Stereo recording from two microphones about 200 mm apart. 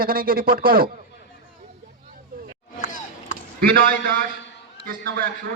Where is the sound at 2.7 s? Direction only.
40° left (ahead or behind).